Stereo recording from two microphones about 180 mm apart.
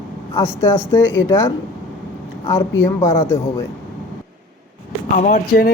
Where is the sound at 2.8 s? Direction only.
15° left (ahead or behind).